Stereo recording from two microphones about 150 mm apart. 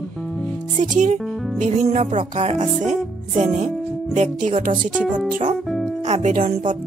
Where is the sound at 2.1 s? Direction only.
45° right (ahead or behind).